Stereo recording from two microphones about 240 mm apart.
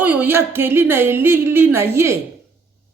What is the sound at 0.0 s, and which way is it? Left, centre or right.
Speech, centre.